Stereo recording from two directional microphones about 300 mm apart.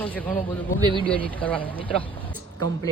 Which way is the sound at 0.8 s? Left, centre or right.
Centre.